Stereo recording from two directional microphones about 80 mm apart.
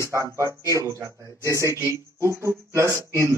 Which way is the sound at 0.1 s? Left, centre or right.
Right.